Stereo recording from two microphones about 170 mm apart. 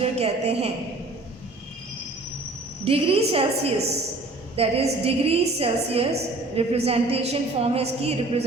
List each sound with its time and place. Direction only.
0.0 s a woman's voice: 40° right (ahead or behind)
2.8 s a woman's voice: 35° right (ahead or behind)